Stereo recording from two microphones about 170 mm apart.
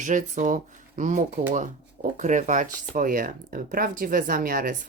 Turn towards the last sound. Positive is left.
turn(degrees=-55)  # may be behind; listen again after turning